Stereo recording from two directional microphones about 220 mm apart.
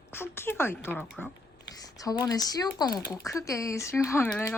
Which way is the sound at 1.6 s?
15° left (ahead or behind).